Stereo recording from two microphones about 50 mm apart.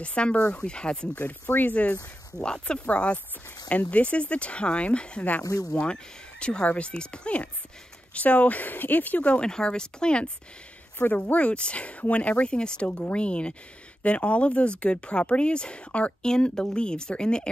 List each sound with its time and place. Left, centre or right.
0.0 s speech: left
1.1 s speech: left
2.3 s speech: centre; by 9.3 s left
9.3 s speech: centre
11.0 s speech: left; by 17.5 s centre